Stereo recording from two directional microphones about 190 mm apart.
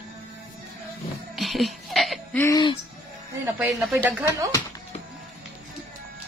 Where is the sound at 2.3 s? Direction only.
15° left (ahead or behind).